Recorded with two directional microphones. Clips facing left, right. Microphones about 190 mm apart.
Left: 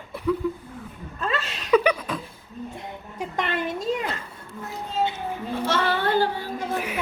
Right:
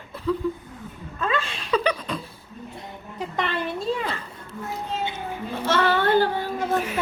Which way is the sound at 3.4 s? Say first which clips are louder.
Even; 45° left (ahead or behind).